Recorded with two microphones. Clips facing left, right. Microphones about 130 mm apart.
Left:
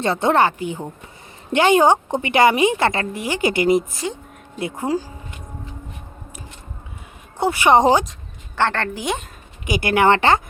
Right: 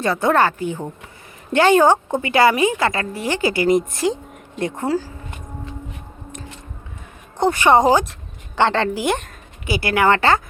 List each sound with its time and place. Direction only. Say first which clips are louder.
0.0 s a woman's voice: even; 25° left (ahead or behind)
3.2 s speech: right 2 dB; 15° left (ahead or behind)
4.0 s a woman's voice: right 7 dB; 5° right (ahead or behind)
4.5 s speech: right 1 dB; 10° left (ahead or behind)
7.3 s a woman's voice: right 1 dB; 10° left (ahead or behind)
7.8 s a woman's voice: even; 25° left (ahead or behind)
8.5 s a woman's voice: right 3 dB; 15° right (ahead or behind)
9.6 s a woman's voice: left 1 dB; 20° left (ahead or behind)